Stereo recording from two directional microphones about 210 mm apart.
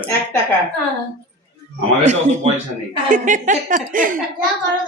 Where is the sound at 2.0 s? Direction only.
35° right (ahead or behind).